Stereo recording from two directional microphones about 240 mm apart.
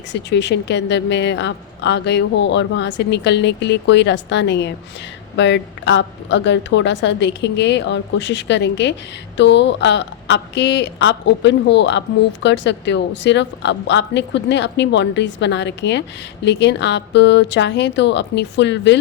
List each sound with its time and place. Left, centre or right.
0.1 s a woman's voice: left